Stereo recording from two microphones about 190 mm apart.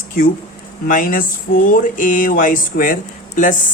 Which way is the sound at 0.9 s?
45° left (ahead or behind).